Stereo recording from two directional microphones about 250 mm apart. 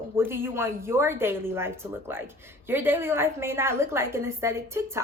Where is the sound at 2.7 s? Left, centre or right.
Centre.